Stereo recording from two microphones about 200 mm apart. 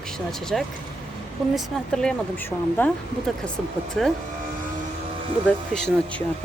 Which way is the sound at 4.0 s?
5° left (ahead or behind).